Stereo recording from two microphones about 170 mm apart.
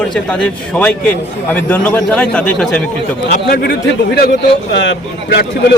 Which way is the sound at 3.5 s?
65° left (ahead or behind).